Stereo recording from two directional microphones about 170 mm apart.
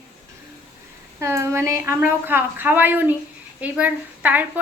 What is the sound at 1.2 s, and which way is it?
A woman's voice, 15° right (ahead or behind).